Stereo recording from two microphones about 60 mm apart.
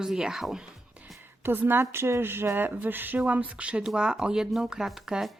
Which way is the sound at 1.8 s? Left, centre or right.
Right.